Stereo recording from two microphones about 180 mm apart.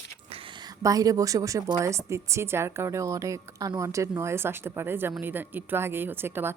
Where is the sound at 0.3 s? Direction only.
30° right (ahead or behind).